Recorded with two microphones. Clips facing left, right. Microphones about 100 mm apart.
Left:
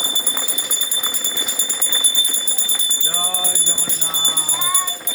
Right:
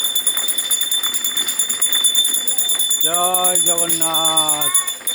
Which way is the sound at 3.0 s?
55° right (ahead or behind).